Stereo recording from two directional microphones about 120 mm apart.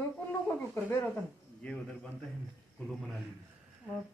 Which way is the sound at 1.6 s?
10° left (ahead or behind).